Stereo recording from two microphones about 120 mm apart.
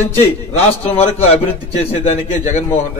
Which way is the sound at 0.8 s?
55° left (ahead or behind).